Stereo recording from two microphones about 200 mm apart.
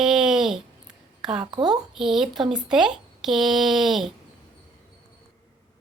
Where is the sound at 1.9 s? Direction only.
Centre (ahead or behind).